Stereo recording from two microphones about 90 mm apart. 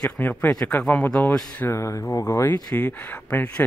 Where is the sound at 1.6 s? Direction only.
30° left (ahead or behind).